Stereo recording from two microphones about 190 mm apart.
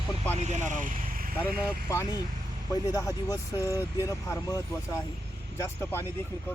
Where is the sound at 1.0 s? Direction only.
45° right (ahead or behind).